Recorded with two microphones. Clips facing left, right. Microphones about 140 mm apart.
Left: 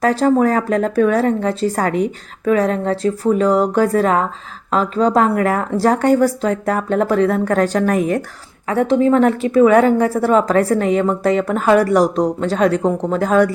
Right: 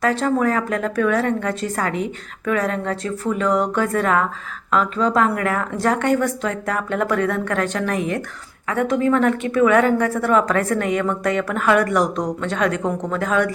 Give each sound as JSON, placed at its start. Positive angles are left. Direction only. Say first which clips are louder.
{"t": 0.0, "sound": "a woman's voice", "louder": "left 5 dB", "side_deg": 35}
{"t": 8.6, "sound": "a woman's voice", "louder": "left 5 dB", "side_deg": 30}